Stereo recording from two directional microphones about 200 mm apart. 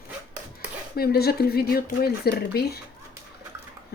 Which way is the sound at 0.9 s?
50° left (ahead or behind).